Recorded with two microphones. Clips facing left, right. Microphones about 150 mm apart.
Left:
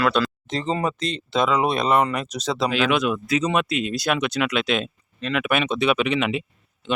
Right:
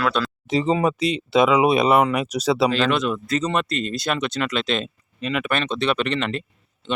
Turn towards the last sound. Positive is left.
turn(degrees=5)  # may be behind; listen again after turning